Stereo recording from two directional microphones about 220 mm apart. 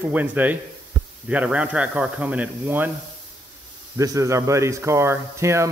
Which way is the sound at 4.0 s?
15° right (ahead or behind).